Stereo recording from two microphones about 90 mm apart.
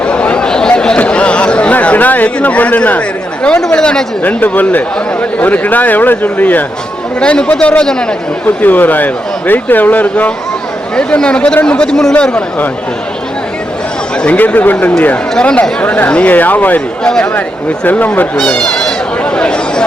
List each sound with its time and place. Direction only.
0.0 s a sound: 15° left (ahead or behind)
3.4 s speech: 10° left (ahead or behind)
4.2 s speech: 20° left (ahead or behind)
14.2 s speech: 15° left (ahead or behind)
17.0 s speech: 10° left (ahead or behind)
18.3 s a sound: 5° left (ahead or behind)